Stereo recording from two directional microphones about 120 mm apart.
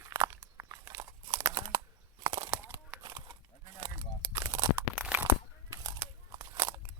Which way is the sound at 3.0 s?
30° right (ahead or behind).